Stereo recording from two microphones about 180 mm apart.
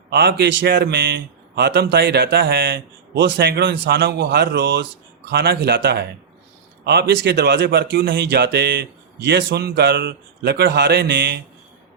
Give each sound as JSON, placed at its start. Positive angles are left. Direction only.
{"t": 0.1, "sound": "a man's voice", "side_deg": -65}